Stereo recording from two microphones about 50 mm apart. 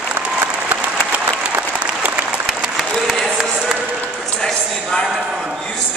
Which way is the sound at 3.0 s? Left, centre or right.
Centre.